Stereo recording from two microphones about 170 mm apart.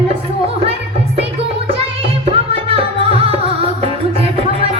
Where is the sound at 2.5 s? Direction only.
35° right (ahead or behind).